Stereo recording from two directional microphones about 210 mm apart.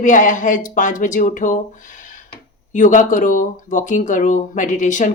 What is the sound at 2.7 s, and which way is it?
Speech, 35° left (ahead or behind).